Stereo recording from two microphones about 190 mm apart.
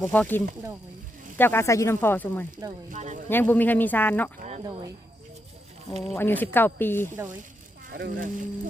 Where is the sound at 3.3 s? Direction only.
10° left (ahead or behind).